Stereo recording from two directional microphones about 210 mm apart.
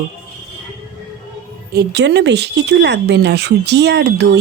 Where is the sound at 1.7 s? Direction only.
55° right (ahead or behind).